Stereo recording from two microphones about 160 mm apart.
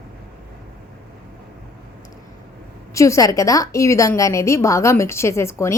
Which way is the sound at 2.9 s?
20° left (ahead or behind).